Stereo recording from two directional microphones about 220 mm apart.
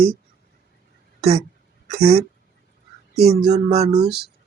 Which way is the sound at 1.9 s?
25° right (ahead or behind).